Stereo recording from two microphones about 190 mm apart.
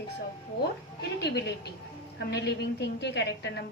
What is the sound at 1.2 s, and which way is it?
A woman's voice, 60° left (ahead or behind).